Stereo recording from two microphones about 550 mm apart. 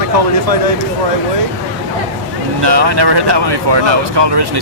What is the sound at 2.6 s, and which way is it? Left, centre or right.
Speech, right.